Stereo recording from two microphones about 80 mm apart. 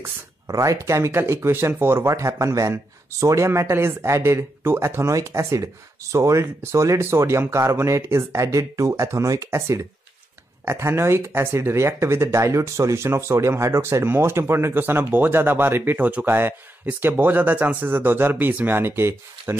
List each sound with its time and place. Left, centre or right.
0.5 s speech: right